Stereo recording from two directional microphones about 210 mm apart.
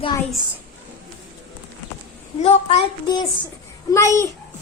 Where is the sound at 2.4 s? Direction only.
30° left (ahead or behind).